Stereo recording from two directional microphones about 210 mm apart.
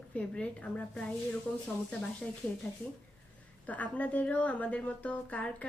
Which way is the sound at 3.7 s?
5° left (ahead or behind).